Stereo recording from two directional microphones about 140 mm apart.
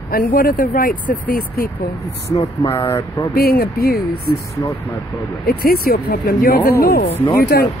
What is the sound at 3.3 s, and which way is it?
Speech, 90° left.